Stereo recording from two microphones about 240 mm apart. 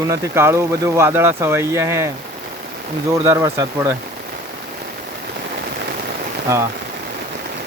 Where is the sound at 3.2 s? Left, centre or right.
Centre.